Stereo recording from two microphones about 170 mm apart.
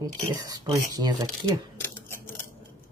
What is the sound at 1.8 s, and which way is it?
Scissors, 15° left (ahead or behind).